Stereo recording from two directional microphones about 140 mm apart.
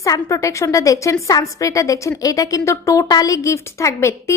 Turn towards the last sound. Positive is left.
turn(degrees=20)  # may be behind; listen again after turning